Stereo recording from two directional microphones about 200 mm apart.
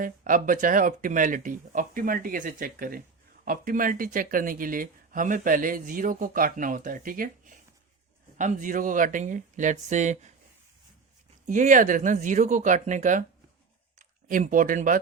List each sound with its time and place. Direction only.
0.0 s speech: 40° right (ahead or behind)
11.4 s speech: 40° right (ahead or behind)